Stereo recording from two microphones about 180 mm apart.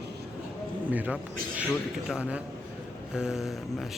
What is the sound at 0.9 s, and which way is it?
A man's voice, 10° right (ahead or behind).